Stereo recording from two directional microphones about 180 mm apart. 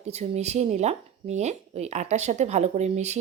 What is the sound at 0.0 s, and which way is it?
Speech, 35° right (ahead or behind).